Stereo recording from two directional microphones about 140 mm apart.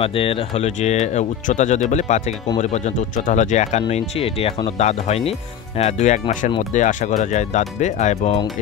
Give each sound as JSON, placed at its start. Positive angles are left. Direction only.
{"t": 0.0, "sound": "speech", "side_deg": 40}
{"t": 1.0, "sound": "speech", "side_deg": 55}
{"t": 3.3, "sound": "speech", "side_deg": 60}
{"t": 4.2, "sound": "speech", "side_deg": 45}